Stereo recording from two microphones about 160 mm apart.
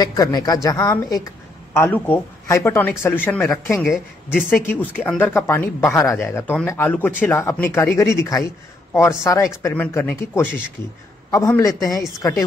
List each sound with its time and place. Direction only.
0.0 s a woman's voice: 25° left (ahead or behind); by 4.5 s 5° right (ahead or behind)
4.5 s a woman's voice: 10° left (ahead or behind)